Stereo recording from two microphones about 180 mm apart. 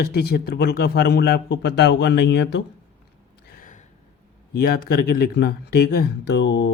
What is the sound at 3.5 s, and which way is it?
Gasp, 45° left (ahead or behind).